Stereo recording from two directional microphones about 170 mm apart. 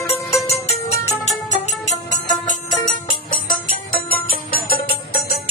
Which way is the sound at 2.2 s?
25° left (ahead or behind).